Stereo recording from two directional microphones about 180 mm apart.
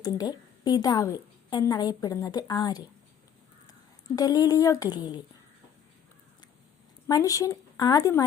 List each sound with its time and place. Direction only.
0.0 s a woman's voice: 20° left (ahead or behind)
7.1 s a woman's voice: 20° left (ahead or behind)